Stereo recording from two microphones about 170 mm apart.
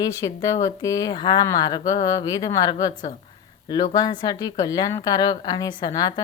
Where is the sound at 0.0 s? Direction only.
20° left (ahead or behind).